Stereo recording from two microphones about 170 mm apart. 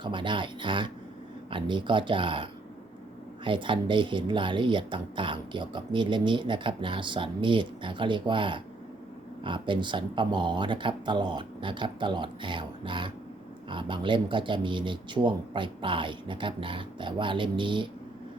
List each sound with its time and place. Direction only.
0.0 s speech: 30° right (ahead or behind)